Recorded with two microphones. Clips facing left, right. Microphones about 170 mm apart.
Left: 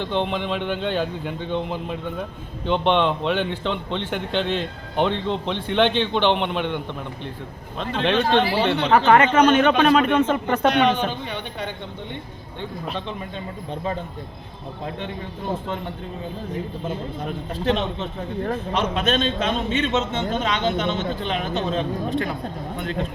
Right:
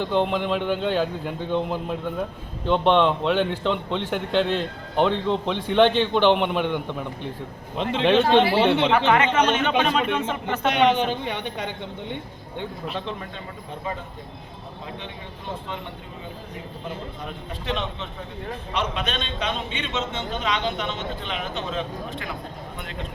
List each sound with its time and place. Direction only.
0.0 s a man's voice: 5° right (ahead or behind)
8.0 s a woman's voice: 10° right (ahead or behind)
8.9 s speech: 45° left (ahead or behind)
10.8 s a woman's voice: 20° right (ahead or behind)
17.2 s speech: 40° left (ahead or behind)